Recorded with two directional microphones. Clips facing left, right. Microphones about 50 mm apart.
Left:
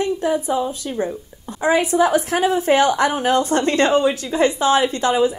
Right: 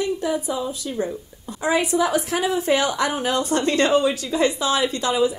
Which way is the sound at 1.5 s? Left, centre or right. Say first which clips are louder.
Left 3 dB; left.